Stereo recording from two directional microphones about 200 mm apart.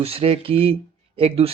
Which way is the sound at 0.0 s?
30° right (ahead or behind).